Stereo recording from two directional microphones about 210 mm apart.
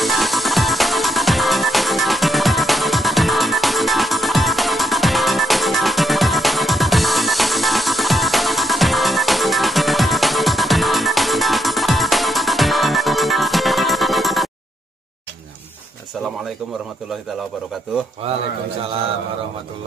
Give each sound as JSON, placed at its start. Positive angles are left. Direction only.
{"t": 0.0, "sound": "music", "side_deg": 0}
{"t": 18.2, "sound": "a man's voice", "side_deg": -25}